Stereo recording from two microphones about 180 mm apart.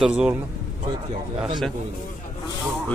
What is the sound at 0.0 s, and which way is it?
Speech, 5° right (ahead or behind).